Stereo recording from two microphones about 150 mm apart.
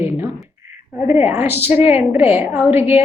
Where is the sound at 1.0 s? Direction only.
15° right (ahead or behind).